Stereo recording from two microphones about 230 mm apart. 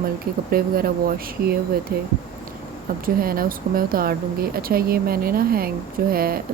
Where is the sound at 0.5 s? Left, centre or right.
Right.